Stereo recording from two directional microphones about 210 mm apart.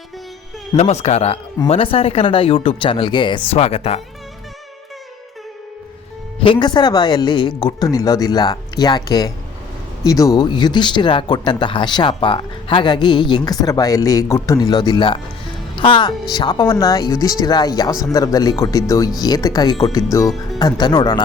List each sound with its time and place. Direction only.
0.8 s speech: 30° left (ahead or behind)
6.4 s speech: 20° left (ahead or behind)